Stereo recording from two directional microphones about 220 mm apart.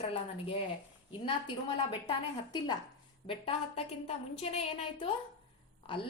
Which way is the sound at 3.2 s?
25° left (ahead or behind).